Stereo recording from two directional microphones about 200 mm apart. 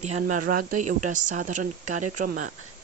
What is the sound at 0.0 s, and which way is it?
Speech, 35° right (ahead or behind).